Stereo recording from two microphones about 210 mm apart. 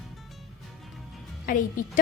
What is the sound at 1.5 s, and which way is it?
Speech, 40° left (ahead or behind).